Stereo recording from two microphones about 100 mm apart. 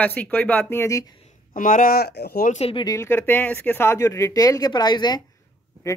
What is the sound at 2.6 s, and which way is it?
Speech, 90° left.